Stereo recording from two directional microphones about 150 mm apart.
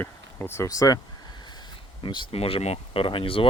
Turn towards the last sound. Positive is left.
turn(degrees=35)  # may be behind; listen again after turning